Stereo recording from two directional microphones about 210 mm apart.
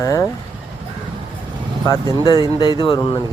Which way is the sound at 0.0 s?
15° left (ahead or behind).